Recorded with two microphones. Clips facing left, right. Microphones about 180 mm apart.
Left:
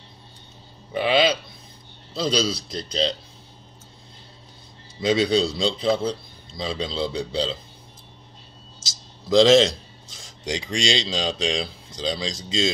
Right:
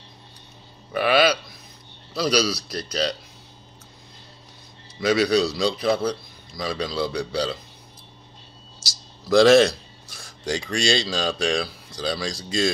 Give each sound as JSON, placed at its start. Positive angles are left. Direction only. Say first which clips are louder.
{"t": 0.9, "sound": "a man's voice", "louder": "right 1 dB", "side_deg": 20}
{"t": 5.0, "sound": "a man's voice", "louder": "right 1 dB", "side_deg": 25}
{"t": 9.2, "sound": "a man's voice", "louder": "right 1 dB", "side_deg": 20}